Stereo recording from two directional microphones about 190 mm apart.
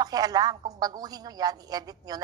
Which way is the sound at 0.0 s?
20° right (ahead or behind).